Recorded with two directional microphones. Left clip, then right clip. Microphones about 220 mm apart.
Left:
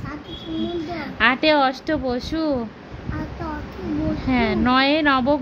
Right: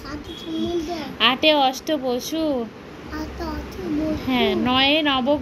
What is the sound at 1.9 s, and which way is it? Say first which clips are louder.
Speech: even; 30° left (ahead or behind).